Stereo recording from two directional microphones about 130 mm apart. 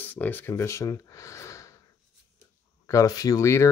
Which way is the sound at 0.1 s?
15° left (ahead or behind).